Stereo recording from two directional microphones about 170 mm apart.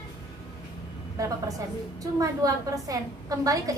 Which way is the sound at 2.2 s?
20° right (ahead or behind).